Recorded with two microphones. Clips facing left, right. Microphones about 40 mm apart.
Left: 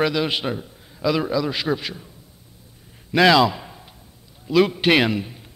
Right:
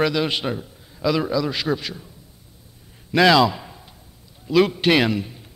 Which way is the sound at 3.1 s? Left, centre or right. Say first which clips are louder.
Even; centre.